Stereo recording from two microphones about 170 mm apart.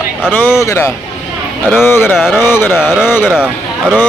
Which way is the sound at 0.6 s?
15° left (ahead or behind).